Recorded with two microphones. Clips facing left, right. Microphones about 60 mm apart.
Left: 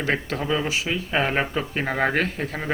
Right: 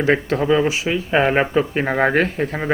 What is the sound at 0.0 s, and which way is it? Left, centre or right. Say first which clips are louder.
Speech: right 7 dB; centre.